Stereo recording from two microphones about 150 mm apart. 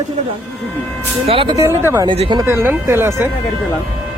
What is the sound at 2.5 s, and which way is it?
Speech, 15° right (ahead or behind).